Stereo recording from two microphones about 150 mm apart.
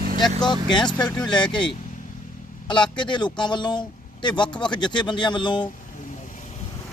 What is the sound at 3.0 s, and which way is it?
Speech, 30° left (ahead or behind).